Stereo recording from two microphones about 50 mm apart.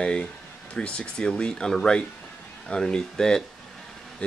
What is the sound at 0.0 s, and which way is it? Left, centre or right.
Speech, left.